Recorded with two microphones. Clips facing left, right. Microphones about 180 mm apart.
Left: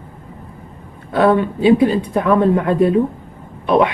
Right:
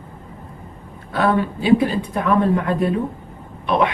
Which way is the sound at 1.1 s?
25° left (ahead or behind).